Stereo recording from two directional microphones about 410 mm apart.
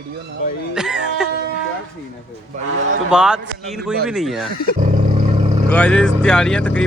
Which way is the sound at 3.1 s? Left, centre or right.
Centre.